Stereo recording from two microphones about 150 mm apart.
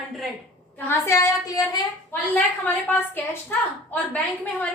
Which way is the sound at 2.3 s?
10° left (ahead or behind).